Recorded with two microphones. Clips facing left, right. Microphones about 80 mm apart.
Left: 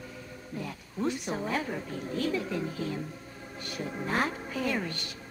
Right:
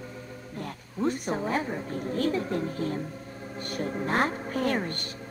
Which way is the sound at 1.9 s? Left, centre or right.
Right.